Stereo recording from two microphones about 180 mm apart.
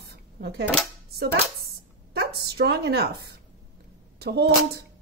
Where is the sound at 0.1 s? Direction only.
65° right (ahead or behind).